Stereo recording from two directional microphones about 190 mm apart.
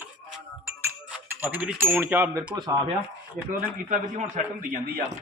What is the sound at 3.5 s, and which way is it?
A man's voice, 45° right (ahead or behind).